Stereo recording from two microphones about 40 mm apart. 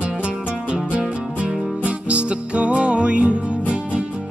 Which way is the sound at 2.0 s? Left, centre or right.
Right.